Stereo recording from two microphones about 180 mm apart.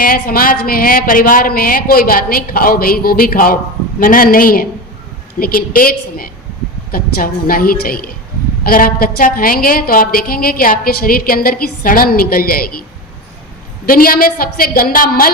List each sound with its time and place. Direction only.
0.0 s a woman's voice: 50° left (ahead or behind)
13.8 s a woman's voice: 55° left (ahead or behind)